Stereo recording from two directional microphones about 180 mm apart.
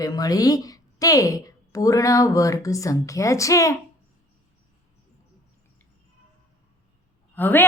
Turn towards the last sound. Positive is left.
turn(degrees=10)  # may be behind; listen again after turning